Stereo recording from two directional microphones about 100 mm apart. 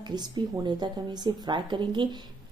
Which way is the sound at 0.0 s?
45° right (ahead or behind).